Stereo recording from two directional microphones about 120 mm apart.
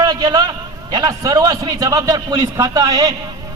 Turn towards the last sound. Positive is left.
turn(degrees=-35)  # may be behind; listen again after turning